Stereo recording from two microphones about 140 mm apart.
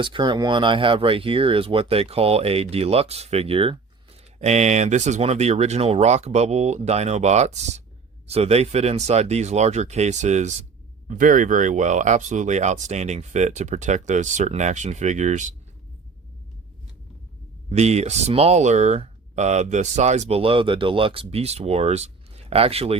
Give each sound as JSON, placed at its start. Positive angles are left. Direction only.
{"t": 0.0, "sound": "speech", "side_deg": -35}
{"t": 11.1, "sound": "speech", "side_deg": -70}
{"t": 17.7, "sound": "speech", "side_deg": -50}